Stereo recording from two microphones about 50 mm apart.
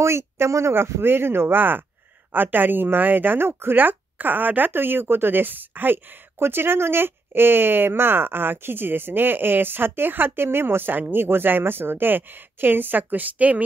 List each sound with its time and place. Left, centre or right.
0.0 s speech: right
1.0 s speech: right
6.4 s speech: right